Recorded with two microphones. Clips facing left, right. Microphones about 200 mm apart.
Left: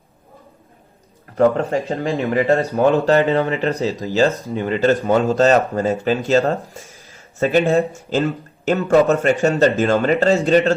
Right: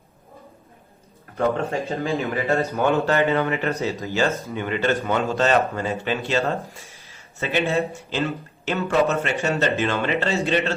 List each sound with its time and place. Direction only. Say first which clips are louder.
1.4 s speech: left 6 dB; 30° left (ahead or behind)